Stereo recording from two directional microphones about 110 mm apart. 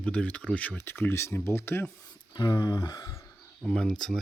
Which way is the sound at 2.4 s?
30° left (ahead or behind).